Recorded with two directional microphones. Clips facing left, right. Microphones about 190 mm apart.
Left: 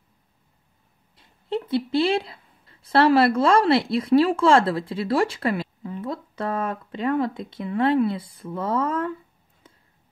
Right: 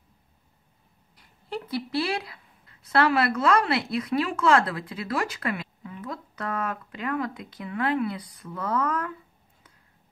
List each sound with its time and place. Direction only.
1.1 s a woman's voice: 25° left (ahead or behind)